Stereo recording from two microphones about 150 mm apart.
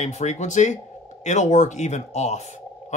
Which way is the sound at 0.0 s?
50° left (ahead or behind).